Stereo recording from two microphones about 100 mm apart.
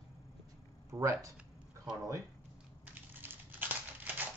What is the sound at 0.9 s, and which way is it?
Speech, 35° right (ahead or behind).